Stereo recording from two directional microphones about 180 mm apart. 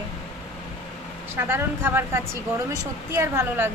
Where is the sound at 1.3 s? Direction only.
15° right (ahead or behind).